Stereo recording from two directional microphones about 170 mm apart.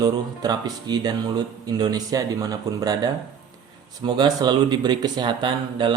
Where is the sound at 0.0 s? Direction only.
25° right (ahead or behind).